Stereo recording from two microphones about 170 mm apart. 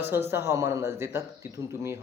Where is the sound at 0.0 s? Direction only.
15° right (ahead or behind).